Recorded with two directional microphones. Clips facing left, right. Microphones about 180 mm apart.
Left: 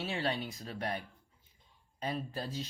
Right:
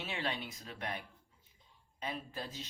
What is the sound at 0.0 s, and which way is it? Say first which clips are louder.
Speech: left 4 dB; 35° left (ahead or behind).